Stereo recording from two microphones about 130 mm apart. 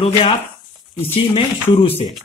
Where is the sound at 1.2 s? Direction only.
45° left (ahead or behind).